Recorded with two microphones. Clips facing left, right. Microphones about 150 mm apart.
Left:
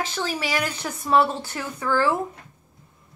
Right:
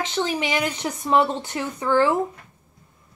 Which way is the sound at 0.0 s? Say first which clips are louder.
Right 3 dB; 20° right (ahead or behind).